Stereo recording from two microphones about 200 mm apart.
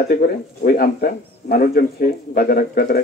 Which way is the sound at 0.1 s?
50° left (ahead or behind).